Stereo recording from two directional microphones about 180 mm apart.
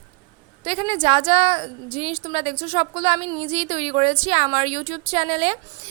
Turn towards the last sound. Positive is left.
turn(degrees=-35)  # may be behind; listen again after turning